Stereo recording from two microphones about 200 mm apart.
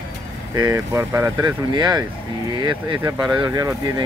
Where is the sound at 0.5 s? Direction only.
15° right (ahead or behind).